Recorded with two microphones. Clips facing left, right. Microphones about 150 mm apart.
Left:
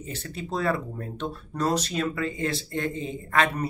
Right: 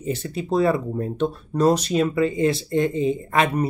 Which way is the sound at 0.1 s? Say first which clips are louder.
Right 9 dB; 15° right (ahead or behind).